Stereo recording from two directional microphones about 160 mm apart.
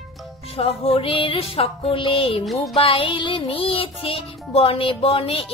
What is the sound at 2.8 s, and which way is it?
Music, 35° left (ahead or behind).